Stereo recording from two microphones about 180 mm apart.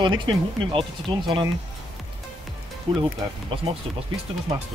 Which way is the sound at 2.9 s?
30° right (ahead or behind).